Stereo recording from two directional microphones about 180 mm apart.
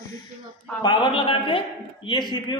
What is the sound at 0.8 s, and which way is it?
A man's voice, 25° left (ahead or behind).